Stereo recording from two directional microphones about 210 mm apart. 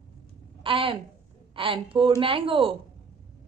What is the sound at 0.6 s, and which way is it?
A woman's voice, 25° right (ahead or behind).